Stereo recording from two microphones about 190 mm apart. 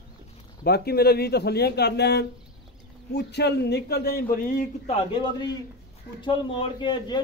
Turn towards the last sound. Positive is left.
turn(degrees=20)  # may be behind; listen again after turning